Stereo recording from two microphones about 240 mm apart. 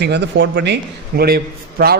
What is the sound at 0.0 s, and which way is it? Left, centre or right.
A man's voice, right.